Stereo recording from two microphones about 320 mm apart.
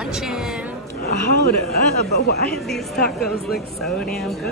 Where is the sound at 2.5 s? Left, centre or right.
Centre.